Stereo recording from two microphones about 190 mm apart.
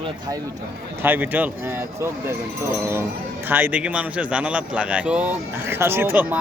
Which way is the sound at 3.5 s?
10° right (ahead or behind).